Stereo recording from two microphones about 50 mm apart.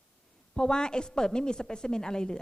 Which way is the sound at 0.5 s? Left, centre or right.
Centre.